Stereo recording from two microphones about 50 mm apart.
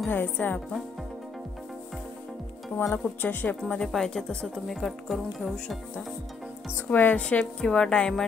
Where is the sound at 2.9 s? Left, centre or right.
Left.